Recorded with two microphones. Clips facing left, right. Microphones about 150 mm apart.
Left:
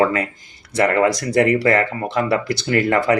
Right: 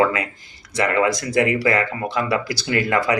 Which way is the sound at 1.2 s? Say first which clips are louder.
Left 3 dB; 60° left (ahead or behind).